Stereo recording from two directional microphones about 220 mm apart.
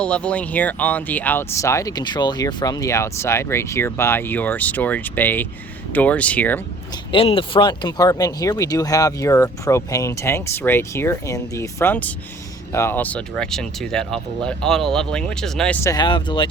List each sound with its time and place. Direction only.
0.0 s speech: 5° left (ahead or behind)
7.1 s speech: 25° left (ahead or behind)